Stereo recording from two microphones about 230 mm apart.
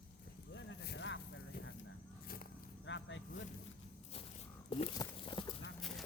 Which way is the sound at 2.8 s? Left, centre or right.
Left.